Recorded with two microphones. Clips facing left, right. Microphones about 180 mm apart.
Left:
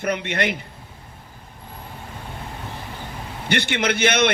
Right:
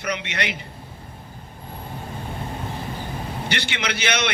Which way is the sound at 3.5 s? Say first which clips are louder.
Left 8 dB; 50° left (ahead or behind).